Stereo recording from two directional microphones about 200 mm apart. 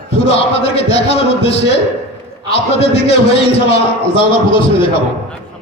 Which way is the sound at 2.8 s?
30° left (ahead or behind).